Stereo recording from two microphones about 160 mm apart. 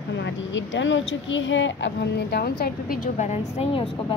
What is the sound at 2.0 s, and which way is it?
A woman's voice, 90° left.